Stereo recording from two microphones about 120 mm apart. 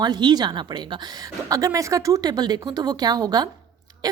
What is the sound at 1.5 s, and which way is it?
A woman's voice, 25° right (ahead or behind).